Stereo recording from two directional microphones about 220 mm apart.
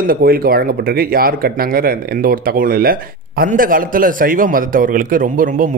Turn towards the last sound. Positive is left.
turn(degrees=-40)  # may be behind; listen again after turning